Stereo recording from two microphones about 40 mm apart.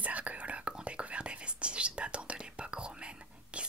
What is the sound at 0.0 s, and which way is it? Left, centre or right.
Whispering, right.